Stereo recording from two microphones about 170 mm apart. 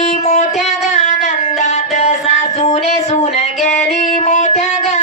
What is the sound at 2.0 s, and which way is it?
Music, 40° left (ahead or behind).